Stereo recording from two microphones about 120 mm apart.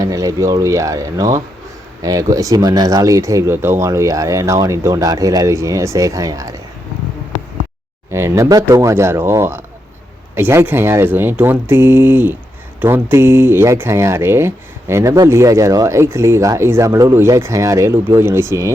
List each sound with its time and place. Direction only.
0.0 s speech: 30° right (ahead or behind)
8.1 s speech: 25° right (ahead or behind)